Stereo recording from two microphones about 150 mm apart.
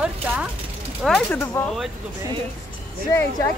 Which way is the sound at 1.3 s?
15° left (ahead or behind).